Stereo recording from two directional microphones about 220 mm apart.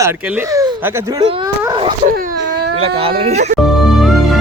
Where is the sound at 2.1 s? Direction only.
45° right (ahead or behind).